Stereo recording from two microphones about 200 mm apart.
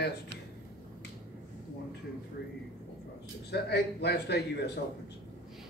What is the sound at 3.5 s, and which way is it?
A man's voice, 55° left (ahead or behind).